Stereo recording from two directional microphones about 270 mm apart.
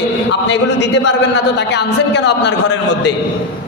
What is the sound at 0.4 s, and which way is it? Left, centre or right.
A woman's voice, left.